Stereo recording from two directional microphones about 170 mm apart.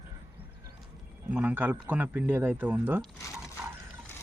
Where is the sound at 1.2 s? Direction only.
10° right (ahead or behind).